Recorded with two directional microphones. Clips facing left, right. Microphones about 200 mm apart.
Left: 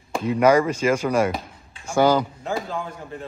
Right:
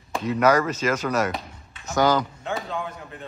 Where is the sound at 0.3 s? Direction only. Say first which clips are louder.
Left 3 dB; 10° left (ahead or behind).